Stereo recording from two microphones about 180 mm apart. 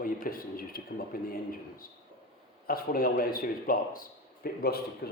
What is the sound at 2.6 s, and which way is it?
A man's voice, 55° left (ahead or behind).